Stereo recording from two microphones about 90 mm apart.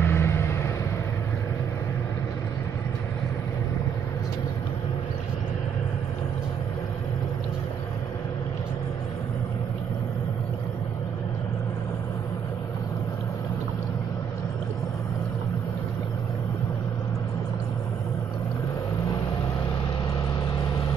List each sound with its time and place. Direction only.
0.0 s vehicle: 25° left (ahead or behind)